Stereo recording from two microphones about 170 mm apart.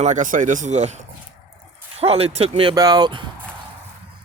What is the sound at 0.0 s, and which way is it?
Speech, 45° right (ahead or behind).